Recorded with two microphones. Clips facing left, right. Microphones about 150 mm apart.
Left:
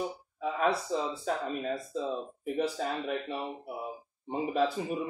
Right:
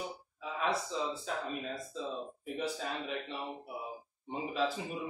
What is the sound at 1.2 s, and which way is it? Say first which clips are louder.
Speech: left 6 dB; 50° left (ahead or behind).